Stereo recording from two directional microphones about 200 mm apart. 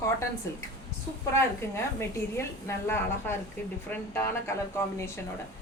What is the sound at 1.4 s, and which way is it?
A woman's voice, 10° left (ahead or behind).